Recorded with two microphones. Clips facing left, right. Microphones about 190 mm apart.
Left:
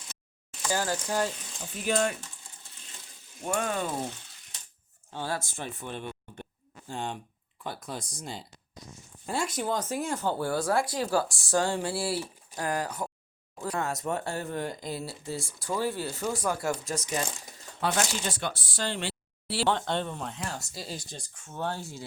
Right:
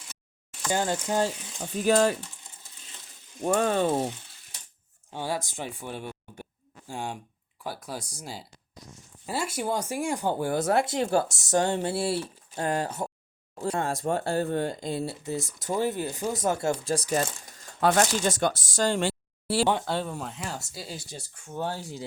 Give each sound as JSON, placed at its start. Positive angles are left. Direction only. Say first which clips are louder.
{"t": 0.7, "sound": "speech", "louder": "right 3 dB", "side_deg": -20}
{"t": 1.7, "sound": "speech", "louder": "right 6 dB", "side_deg": -40}
{"t": 3.4, "sound": "speech", "louder": "right 6 dB", "side_deg": -35}
{"t": 5.1, "sound": "speech", "louder": "right 2 dB", "side_deg": -15}
{"t": 17.7, "sound": "speech", "louder": "right 6 dB", "side_deg": -50}
{"t": 19.6, "sound": "speech", "louder": "left 3 dB", "side_deg": -10}